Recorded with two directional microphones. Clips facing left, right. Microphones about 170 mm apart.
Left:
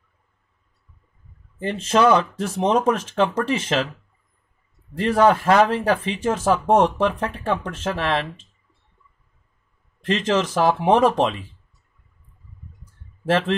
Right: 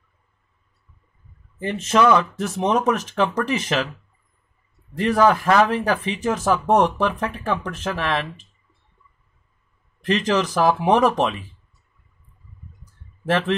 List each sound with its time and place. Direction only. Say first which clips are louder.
1.6 s speech: even; 30° left (ahead or behind)
4.9 s speech: even; 30° left (ahead or behind)
10.0 s speech: even; 25° left (ahead or behind)